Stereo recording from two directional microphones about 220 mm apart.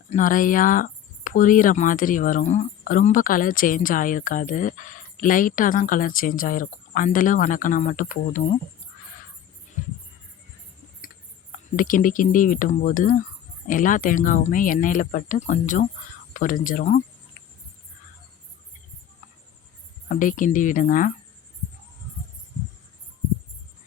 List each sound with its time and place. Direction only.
0.1 s speech: 35° left (ahead or behind)
9.8 s a sound: 35° left (ahead or behind)
11.8 s speech: 40° left (ahead or behind)
20.1 s speech: 35° left (ahead or behind)